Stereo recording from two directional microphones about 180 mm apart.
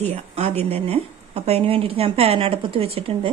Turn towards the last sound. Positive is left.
turn(degrees=-30)  # may be behind; listen again after turning